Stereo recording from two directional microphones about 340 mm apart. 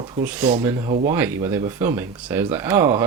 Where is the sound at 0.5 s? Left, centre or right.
Centre.